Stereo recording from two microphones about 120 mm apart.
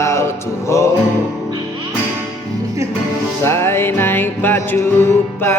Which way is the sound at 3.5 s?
20° left (ahead or behind).